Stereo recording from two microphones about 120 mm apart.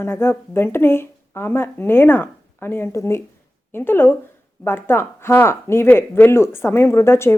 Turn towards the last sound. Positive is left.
turn(degrees=20)  # may be behind; listen again after turning